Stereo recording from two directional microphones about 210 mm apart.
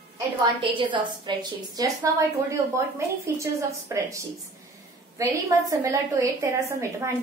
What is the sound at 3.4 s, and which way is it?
A woman's voice, 15° right (ahead or behind).